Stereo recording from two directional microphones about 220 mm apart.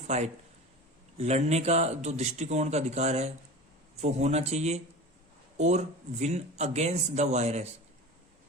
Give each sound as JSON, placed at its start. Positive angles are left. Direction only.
{"t": 0.1, "sound": "speech", "side_deg": -30}